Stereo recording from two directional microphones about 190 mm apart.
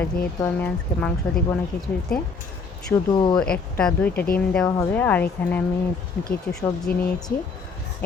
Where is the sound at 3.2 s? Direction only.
25° left (ahead or behind).